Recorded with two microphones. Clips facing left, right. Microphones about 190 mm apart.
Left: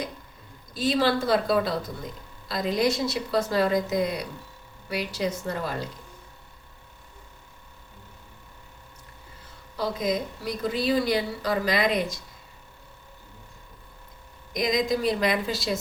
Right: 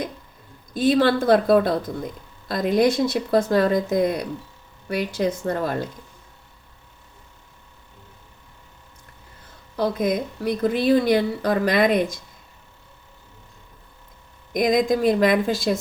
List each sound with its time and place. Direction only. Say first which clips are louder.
0.7 s speech: right 5 dB; 55° right (ahead or behind)
9.7 s speech: right 5 dB; 55° right (ahead or behind)
14.5 s speech: right 6 dB; 50° right (ahead or behind)